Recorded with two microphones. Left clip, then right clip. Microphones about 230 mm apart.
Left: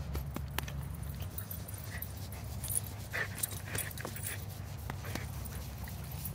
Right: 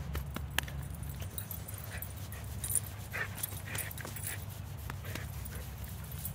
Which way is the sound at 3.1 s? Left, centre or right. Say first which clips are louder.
Left 1 dB; centre.